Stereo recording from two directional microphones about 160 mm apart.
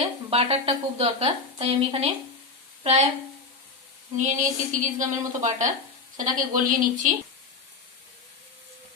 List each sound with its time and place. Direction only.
0.0 s a woman's voice: 35° right (ahead or behind)
4.2 s a woman's voice: 50° right (ahead or behind)